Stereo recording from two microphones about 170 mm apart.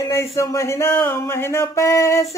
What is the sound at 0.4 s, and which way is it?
Speech, 15° left (ahead or behind).